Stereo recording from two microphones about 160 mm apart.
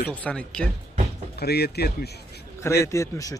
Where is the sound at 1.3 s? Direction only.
90° left.